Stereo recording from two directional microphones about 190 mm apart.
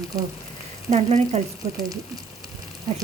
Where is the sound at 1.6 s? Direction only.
15° right (ahead or behind).